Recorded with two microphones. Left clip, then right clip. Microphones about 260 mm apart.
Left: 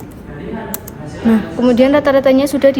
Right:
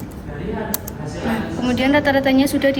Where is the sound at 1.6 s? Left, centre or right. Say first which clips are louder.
Left 6 dB; left.